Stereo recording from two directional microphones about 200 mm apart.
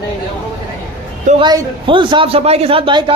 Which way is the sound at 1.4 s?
25° right (ahead or behind).